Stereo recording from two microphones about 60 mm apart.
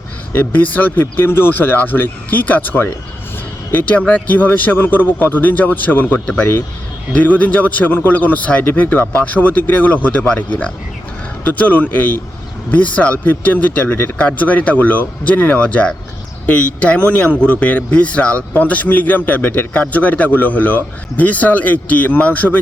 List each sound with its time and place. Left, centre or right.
0.3 s speech: left
7.1 s speech: left